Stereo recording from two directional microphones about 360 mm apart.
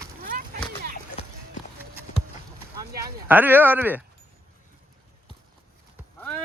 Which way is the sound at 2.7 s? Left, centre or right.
Right.